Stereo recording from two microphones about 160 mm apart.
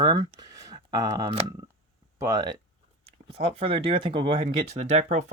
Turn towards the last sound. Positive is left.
turn(degrees=-45)  # may be behind; listen again after turning